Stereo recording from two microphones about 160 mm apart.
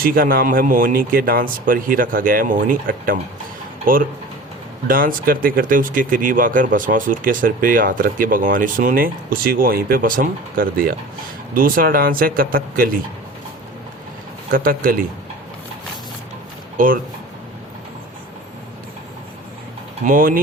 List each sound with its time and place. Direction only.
0.0 s speech: 65° right (ahead or behind)
14.5 s speech: 65° right (ahead or behind)
16.7 s speech: 60° right (ahead or behind)
20.1 s speech: 60° right (ahead or behind)